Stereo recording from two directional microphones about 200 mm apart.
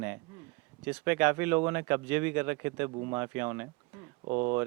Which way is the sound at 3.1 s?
10° right (ahead or behind).